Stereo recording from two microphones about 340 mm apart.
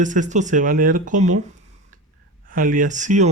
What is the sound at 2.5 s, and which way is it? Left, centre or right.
Speech, right.